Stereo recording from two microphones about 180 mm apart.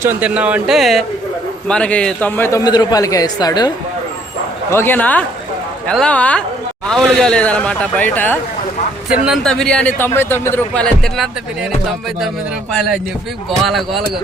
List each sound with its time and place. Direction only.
0.0 s speech: 10° right (ahead or behind); by 3.7 s 25° left (ahead or behind)
4.7 s speech: 10° left (ahead or behind)
9.0 s speech: 5° right (ahead or behind)
13.7 s speech: centre (ahead or behind)